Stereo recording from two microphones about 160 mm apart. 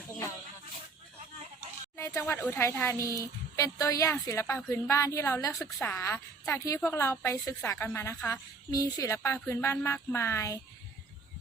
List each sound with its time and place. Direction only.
2.0 s a woman's voice: 15° left (ahead or behind)